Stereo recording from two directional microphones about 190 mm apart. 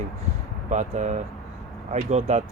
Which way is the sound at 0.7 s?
40° right (ahead or behind).